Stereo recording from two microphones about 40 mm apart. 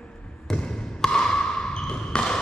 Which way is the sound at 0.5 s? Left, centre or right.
Centre.